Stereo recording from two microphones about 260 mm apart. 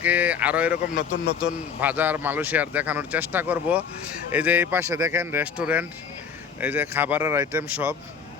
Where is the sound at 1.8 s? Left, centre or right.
Centre.